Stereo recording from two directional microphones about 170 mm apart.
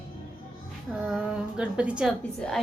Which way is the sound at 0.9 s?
5° right (ahead or behind).